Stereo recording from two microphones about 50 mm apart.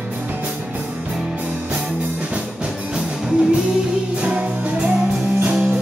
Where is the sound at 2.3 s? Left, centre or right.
Centre.